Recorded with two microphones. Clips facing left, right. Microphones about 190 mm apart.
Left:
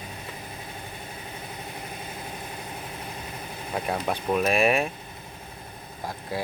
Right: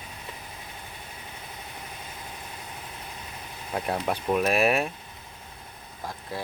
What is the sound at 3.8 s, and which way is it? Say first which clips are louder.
Speech: even; centre (ahead or behind).